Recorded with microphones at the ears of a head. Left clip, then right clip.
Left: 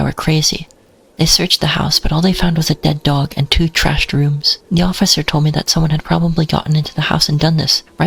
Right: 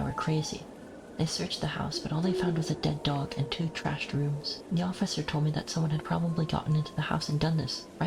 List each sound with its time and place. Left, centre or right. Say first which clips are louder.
0.0 s speech: left 16 dB; left